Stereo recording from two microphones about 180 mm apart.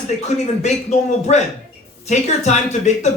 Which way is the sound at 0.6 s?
40° left (ahead or behind).